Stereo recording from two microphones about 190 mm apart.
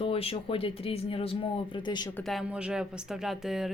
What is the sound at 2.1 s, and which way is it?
Speech, centre (ahead or behind).